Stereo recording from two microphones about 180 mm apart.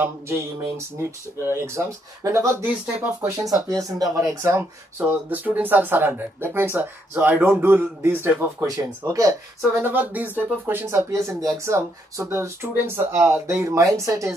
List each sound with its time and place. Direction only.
1.4 s speech: 15° right (ahead or behind)